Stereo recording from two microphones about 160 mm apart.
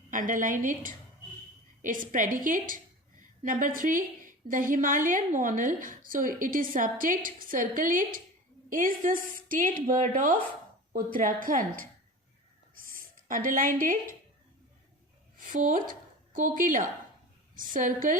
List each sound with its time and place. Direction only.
0.1 s a woman's voice: 55° right (ahead or behind)
15.4 s a woman's voice: 55° right (ahead or behind)